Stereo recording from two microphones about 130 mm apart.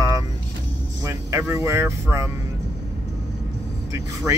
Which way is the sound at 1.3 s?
20° right (ahead or behind).